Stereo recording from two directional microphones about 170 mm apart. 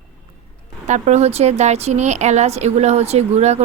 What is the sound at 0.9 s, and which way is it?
Speech, 45° right (ahead or behind).